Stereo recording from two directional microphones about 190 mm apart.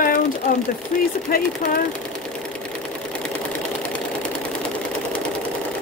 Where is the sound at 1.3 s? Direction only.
50° left (ahead or behind).